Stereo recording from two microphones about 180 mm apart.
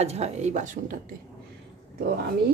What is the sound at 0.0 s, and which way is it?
Speech, 35° right (ahead or behind).